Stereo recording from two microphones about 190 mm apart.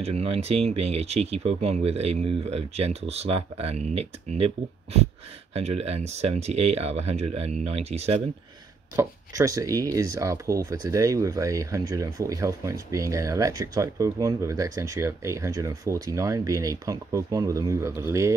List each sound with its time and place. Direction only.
0.0 s speech: 35° right (ahead or behind)
5.5 s speech: 35° right (ahead or behind)
8.9 s speech: 15° right (ahead or behind)